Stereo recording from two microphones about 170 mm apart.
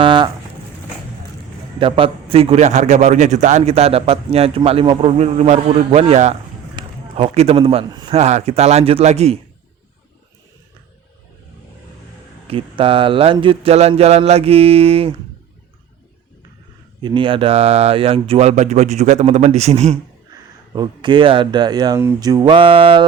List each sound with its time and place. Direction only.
0.0 s speech: 30° right (ahead or behind)
1.8 s a man's voice: 35° right (ahead or behind)
8.1 s a man's voice: 40° right (ahead or behind)
12.5 s a man's voice: 30° right (ahead or behind)
17.0 s a man's voice: 30° right (ahead or behind)
20.7 s speech: 25° right (ahead or behind)